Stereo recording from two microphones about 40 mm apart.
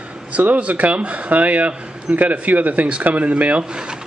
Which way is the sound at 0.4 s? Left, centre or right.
Right.